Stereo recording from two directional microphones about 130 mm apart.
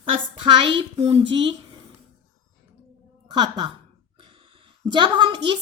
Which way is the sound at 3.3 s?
35° right (ahead or behind).